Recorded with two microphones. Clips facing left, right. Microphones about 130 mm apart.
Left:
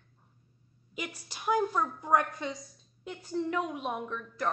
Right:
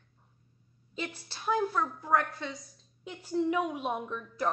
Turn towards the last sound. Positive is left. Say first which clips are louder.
# right 1 dB
turn(degrees=-5)  # may be behind; listen again after turning